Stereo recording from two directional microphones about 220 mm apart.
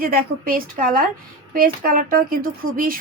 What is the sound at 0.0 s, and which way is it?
A woman's voice, 40° right (ahead or behind).